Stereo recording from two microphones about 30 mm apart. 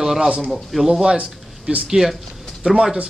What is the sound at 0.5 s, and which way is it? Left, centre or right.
Speech, centre.